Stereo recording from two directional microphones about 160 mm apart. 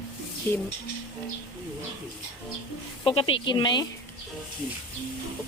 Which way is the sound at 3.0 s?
35° left (ahead or behind).